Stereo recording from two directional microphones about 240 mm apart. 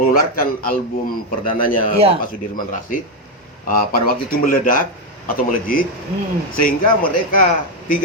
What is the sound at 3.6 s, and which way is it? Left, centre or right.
A man's voice, left.